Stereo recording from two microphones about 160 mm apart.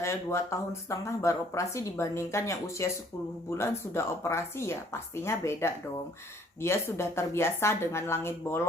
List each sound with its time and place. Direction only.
0.0 s speech: 15° left (ahead or behind)